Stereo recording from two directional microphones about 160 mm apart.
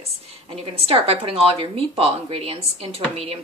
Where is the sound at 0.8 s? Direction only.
35° right (ahead or behind).